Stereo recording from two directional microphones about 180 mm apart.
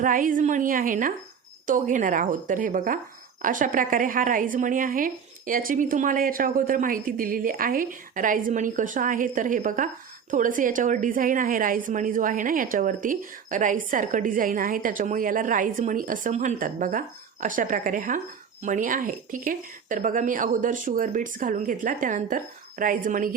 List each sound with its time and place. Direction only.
0.0 s a woman's voice: 50° right (ahead or behind)